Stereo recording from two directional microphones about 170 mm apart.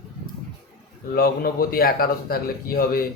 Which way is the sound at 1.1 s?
65° left (ahead or behind).